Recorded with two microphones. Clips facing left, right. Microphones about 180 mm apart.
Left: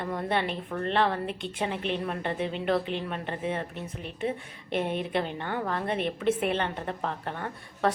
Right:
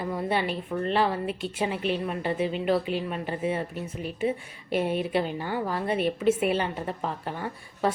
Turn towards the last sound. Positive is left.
turn(degrees=-5)  # may be behind; listen again after turning